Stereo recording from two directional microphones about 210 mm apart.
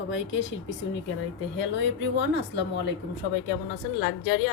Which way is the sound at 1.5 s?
60° left (ahead or behind).